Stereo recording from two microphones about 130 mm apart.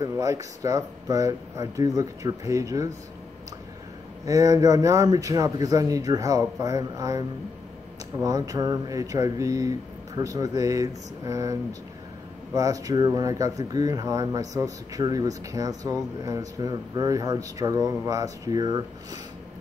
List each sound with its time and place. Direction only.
0.0 s speech: 25° right (ahead or behind)
4.3 s speech: 25° right (ahead or behind)
12.5 s speech: 25° right (ahead or behind)